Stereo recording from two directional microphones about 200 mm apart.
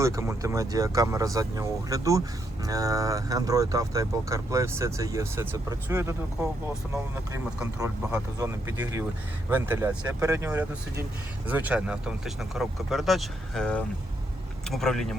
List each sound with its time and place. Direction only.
0.0 s speech: 15° right (ahead or behind)
7.8 s speech: 15° right (ahead or behind); by 15.2 s centre (ahead or behind)